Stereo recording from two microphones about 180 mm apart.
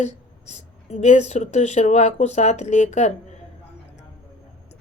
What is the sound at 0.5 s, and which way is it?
Speech, 40° left (ahead or behind).